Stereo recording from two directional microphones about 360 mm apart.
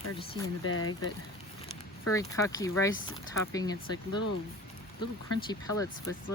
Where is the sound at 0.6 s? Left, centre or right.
Left.